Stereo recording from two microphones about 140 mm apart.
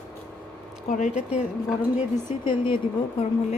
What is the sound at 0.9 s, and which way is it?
Speech, 60° left (ahead or behind).